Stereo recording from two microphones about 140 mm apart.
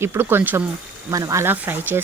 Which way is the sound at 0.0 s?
15° right (ahead or behind).